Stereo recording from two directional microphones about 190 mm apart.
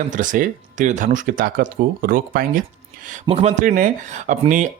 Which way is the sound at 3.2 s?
35° right (ahead or behind).